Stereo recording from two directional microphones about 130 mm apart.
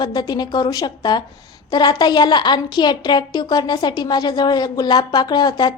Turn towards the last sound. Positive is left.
turn(degrees=30)  # may be behind; listen again after turning